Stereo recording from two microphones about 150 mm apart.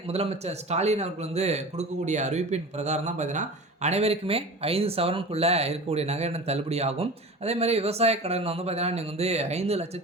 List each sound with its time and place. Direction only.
0.1 s a man's voice: 45° right (ahead or behind)